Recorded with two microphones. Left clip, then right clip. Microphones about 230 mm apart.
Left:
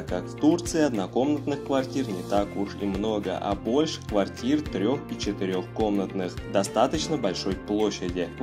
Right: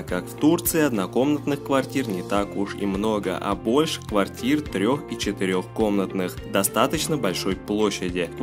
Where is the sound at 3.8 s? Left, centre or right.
Right.